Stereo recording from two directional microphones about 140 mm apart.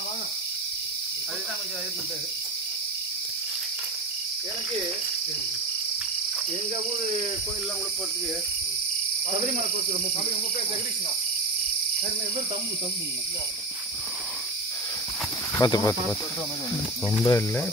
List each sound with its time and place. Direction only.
15.5 s speech: 25° left (ahead or behind)
17.2 s speech: 25° left (ahead or behind)